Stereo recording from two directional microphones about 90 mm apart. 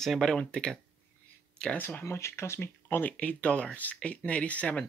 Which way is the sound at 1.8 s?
25° left (ahead or behind).